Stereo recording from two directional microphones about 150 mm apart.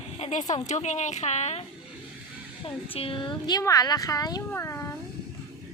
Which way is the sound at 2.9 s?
35° left (ahead or behind).